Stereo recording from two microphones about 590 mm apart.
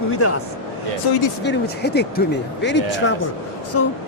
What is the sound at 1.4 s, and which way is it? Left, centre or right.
A man's voice, centre.